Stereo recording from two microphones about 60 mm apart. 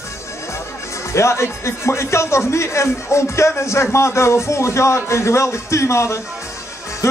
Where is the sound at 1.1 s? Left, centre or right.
Left.